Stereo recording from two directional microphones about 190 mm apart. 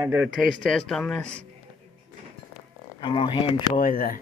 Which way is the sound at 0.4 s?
Centre (ahead or behind).